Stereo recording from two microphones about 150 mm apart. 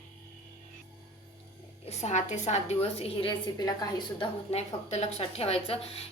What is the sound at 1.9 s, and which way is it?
A woman's voice, 50° left (ahead or behind).